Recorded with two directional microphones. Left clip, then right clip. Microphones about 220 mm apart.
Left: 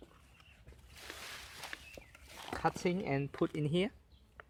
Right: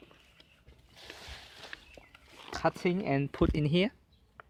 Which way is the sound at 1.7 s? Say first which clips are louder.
Right 3 dB; 15° right (ahead or behind).